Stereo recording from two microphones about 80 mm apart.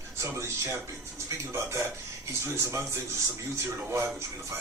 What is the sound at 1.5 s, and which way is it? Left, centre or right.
Speech, right.